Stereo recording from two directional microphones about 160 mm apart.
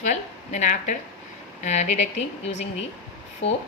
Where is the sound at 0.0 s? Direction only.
50° left (ahead or behind).